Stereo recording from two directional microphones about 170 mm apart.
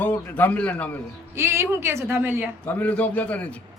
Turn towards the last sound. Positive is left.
turn(degrees=10)  # may be behind; listen again after turning